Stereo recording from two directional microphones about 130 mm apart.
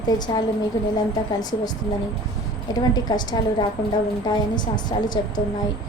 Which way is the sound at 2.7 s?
30° left (ahead or behind).